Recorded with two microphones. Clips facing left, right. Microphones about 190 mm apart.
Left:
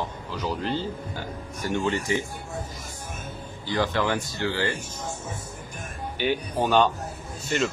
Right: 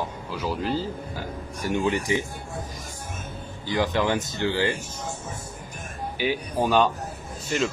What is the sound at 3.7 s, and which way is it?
Speech, 15° right (ahead or behind).